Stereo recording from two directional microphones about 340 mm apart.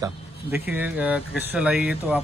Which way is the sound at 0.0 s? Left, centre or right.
Centre.